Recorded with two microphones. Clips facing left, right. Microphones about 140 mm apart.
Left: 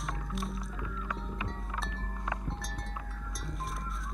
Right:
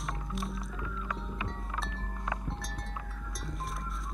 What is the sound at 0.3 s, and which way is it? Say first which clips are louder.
Music: even; centre (ahead or behind).